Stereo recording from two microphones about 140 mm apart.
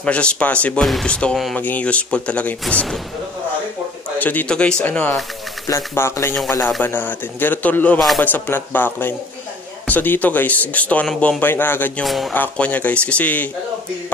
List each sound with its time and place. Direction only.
0.0 s speech: 10° left (ahead or behind)
4.2 s speech: 10° left (ahead or behind)
12.0 s speech: centre (ahead or behind)